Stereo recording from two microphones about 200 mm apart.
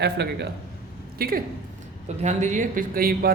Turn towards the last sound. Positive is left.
turn(degrees=-50)  # may be behind; listen again after turning